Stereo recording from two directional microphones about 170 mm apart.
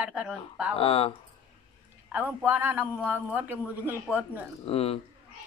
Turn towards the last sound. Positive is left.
turn(degrees=35)  # may be behind; listen again after turning